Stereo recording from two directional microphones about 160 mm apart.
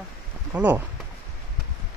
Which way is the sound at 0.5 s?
10° right (ahead or behind).